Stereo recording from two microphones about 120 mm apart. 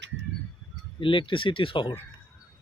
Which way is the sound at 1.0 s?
45° left (ahead or behind).